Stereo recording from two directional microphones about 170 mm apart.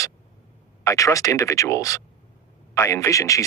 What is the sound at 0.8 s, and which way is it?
Speech, 20° left (ahead or behind).